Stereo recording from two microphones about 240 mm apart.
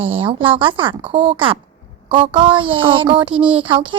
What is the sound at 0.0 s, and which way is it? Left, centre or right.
A child's voice, right.